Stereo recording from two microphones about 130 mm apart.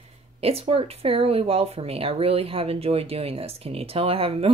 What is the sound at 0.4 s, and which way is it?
Speech, 50° right (ahead or behind).